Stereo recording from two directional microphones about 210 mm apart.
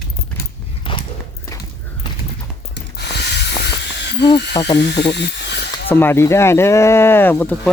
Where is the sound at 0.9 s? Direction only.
25° left (ahead or behind).